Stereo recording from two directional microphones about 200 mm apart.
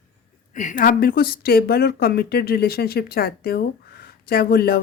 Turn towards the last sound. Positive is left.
turn(degrees=50)  # may be behind; listen again after turning